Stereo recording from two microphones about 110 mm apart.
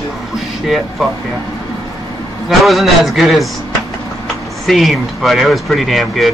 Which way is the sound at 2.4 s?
Centre (ahead or behind).